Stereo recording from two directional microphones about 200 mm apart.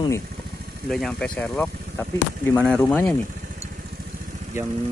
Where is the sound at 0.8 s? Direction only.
Centre (ahead or behind).